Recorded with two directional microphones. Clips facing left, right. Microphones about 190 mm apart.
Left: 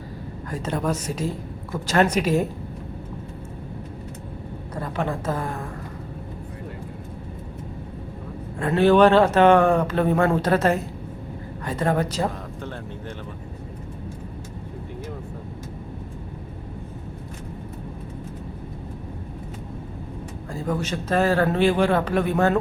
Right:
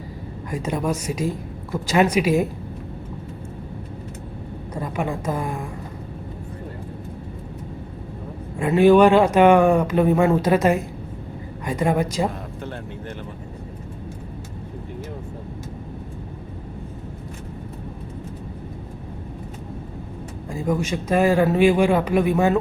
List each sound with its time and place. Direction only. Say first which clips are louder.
0.5 s speech: right 1 dB; 10° right (ahead or behind)
4.7 s speech: right 1 dB; 10° right (ahead or behind)
8.5 s speech: right 3 dB; 10° right (ahead or behind)
20.5 s speech: right 3 dB; 10° right (ahead or behind)